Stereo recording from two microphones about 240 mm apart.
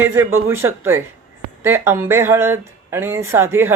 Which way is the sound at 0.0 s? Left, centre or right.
Centre.